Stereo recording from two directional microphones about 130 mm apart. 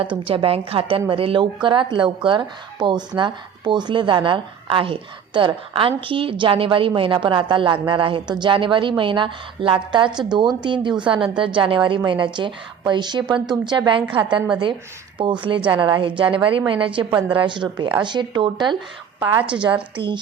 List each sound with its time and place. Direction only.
0.0 s a woman's voice: 45° right (ahead or behind)
19.4 s a woman's voice: 10° right (ahead or behind)